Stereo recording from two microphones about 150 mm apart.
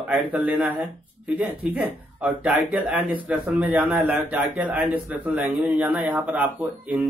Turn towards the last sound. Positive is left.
turn(degrees=-10)  # may be behind; listen again after turning